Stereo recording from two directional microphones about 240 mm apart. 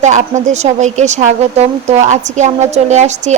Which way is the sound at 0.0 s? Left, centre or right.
Right.